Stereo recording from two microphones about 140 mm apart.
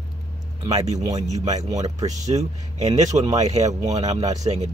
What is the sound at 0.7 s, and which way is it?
Speech, 55° right (ahead or behind).